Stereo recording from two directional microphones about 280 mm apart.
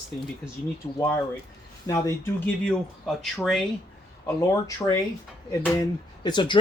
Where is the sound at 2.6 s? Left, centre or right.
Centre.